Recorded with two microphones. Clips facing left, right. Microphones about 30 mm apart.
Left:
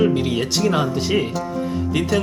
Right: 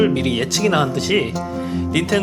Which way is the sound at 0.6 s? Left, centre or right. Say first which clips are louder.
Right 3 dB; right.